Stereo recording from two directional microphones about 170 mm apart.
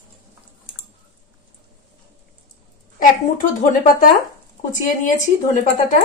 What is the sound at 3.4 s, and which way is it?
Speech, 55° left (ahead or behind).